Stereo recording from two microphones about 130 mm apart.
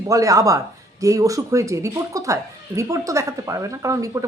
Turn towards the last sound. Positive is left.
turn(degrees=-25)  # may be behind; listen again after turning